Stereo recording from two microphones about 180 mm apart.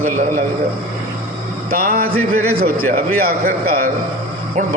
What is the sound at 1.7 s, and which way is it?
A man's voice, 55° right (ahead or behind).